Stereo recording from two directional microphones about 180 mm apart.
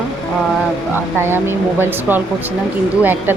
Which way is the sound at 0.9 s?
15° right (ahead or behind).